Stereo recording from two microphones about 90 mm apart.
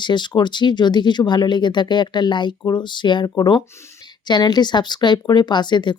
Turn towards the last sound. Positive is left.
turn(degrees=55)  # may be behind; listen again after turning